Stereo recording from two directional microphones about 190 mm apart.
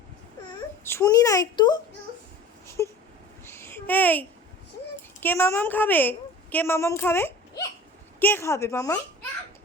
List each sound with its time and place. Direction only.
0.9 s a child's voice: 15° left (ahead or behind)
2.8 s a sound: 15° left (ahead or behind)
3.4 s babbling: 10° left (ahead or behind)
5.2 s a woman's voice: 10° left (ahead or behind)